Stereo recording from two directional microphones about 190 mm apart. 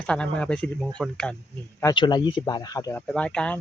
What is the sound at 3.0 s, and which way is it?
Speech, 5° left (ahead or behind).